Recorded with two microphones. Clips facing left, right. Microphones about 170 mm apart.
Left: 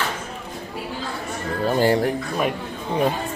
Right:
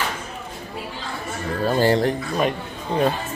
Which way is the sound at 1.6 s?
15° left (ahead or behind).